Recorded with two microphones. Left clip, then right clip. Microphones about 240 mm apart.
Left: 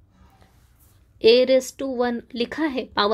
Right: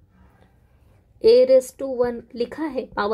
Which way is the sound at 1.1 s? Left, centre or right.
Centre.